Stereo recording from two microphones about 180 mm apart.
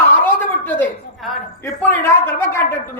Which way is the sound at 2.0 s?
15° left (ahead or behind).